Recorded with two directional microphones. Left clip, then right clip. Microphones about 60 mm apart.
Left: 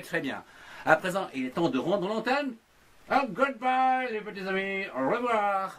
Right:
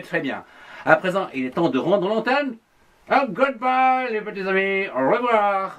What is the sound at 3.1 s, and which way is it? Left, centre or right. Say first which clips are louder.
Speech: right 7 dB; centre.